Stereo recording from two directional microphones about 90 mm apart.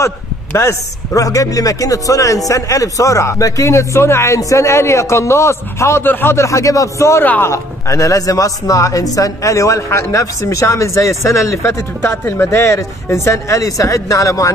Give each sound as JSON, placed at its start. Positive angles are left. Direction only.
{"t": 0.6, "sound": "speech", "side_deg": 35}
{"t": 7.2, "sound": "a man's voice", "side_deg": 20}
{"t": 7.5, "sound": "speech", "side_deg": 35}